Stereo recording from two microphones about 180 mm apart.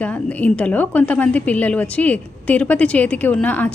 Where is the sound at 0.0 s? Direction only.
10° left (ahead or behind).